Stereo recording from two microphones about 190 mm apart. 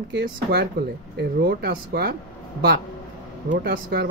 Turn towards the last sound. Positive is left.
turn(degrees=-60)  # may be behind; listen again after turning